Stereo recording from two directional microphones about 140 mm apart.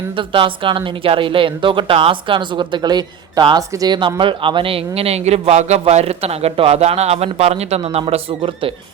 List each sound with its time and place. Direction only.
0.2 s speech: 35° right (ahead or behind)